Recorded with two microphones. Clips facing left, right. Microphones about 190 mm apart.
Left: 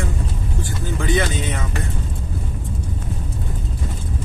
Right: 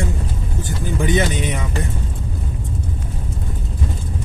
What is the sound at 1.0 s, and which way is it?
Vehicle, 15° right (ahead or behind).